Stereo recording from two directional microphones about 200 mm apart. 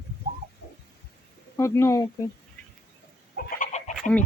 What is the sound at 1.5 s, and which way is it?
Speech, 15° left (ahead or behind).